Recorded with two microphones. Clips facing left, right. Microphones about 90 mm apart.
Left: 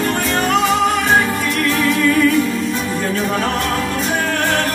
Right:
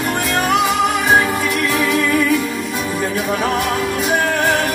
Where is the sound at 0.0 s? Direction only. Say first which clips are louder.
Left 1 dB; 10° right (ahead or behind).